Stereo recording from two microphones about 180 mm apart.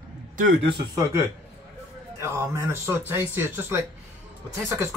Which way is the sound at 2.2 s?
15° right (ahead or behind).